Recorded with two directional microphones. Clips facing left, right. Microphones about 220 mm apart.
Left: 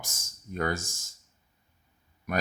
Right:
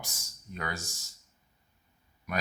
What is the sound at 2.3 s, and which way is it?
Speech, 50° left (ahead or behind).